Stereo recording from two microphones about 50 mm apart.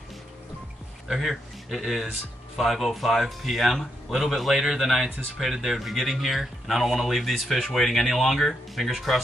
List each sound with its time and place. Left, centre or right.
1.0 s speech: centre